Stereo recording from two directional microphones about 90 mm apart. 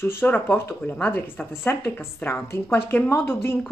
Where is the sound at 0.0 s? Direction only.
25° left (ahead or behind).